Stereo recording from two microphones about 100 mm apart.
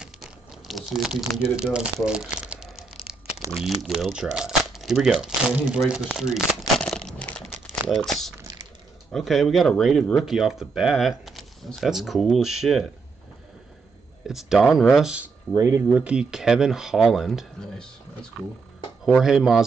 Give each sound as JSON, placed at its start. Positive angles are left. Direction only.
{"t": 0.7, "sound": "speech", "side_deg": 0}
{"t": 2.0, "sound": "crumpling", "side_deg": -10}
{"t": 3.5, "sound": "speech", "side_deg": -5}
{"t": 6.8, "sound": "a sound", "side_deg": 5}
{"t": 7.9, "sound": "speech", "side_deg": 0}
{"t": 14.2, "sound": "speech", "side_deg": -5}
{"t": 15.5, "sound": "speech", "side_deg": -25}
{"t": 16.0, "sound": "speech", "side_deg": -10}
{"t": 19.1, "sound": "speech", "side_deg": -5}